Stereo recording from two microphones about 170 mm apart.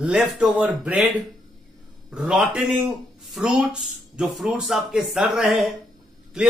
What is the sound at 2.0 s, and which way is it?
Speech, 5° right (ahead or behind).